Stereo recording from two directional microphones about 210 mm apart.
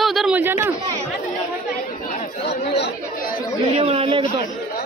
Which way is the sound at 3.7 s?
25° right (ahead or behind).